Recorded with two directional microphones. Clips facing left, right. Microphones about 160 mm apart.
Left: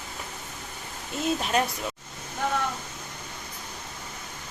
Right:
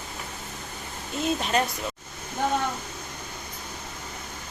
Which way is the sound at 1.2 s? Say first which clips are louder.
Even; 5° left (ahead or behind).